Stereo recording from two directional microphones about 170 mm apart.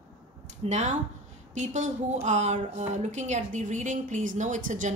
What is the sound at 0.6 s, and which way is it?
A woman's voice, 40° right (ahead or behind).